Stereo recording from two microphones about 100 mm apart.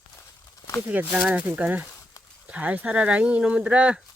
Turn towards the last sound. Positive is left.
turn(degrees=-10)  # may be behind; listen again after turning